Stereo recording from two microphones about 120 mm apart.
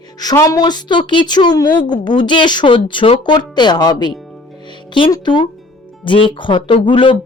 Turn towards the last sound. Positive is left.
turn(degrees=45)  # may be behind; listen again after turning